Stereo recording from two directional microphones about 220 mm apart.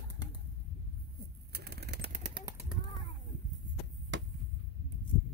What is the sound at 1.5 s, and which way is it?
Bird, 50° right (ahead or behind).